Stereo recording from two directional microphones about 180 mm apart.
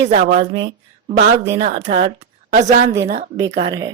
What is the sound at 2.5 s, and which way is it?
Speech, 45° right (ahead or behind).